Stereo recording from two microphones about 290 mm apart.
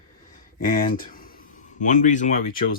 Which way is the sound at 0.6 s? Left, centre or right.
Left.